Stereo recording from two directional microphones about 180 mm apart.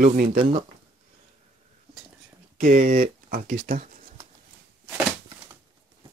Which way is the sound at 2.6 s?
50° right (ahead or behind).